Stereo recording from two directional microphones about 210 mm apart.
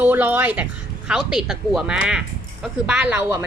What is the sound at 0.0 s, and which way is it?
Speech, 10° right (ahead or behind).